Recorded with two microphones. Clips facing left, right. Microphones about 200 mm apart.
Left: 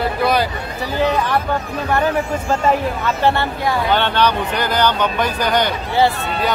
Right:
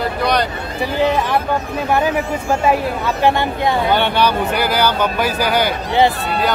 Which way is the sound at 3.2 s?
15° right (ahead or behind).